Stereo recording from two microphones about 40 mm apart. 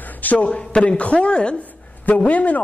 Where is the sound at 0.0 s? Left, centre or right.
Left.